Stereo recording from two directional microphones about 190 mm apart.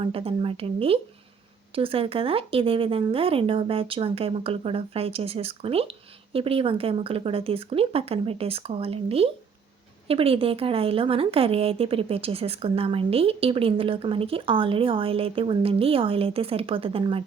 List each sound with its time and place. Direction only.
0.0 s speech: 30° right (ahead or behind)